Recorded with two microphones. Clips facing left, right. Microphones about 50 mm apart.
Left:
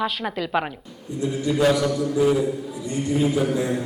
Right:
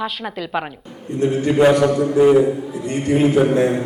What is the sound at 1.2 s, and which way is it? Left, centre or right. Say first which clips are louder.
A man's voice: right 6 dB; right.